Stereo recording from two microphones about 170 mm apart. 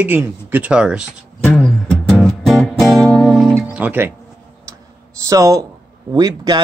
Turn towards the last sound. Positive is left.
turn(degrees=-25)  # may be behind; listen again after turning